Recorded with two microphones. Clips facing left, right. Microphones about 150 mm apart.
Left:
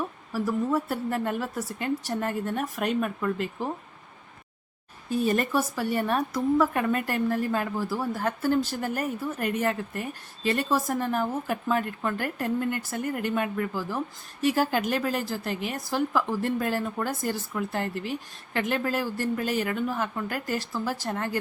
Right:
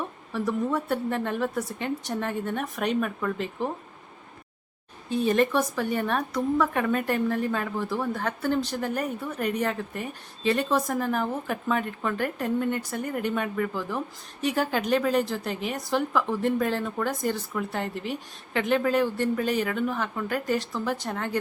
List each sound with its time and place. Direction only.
0.3 s speech: 5° left (ahead or behind)
5.0 s speech: 5° left (ahead or behind)